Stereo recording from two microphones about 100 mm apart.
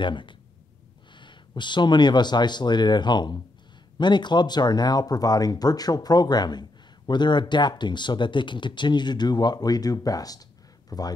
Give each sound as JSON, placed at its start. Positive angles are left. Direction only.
{"t": 0.0, "sound": "speech", "side_deg": 55}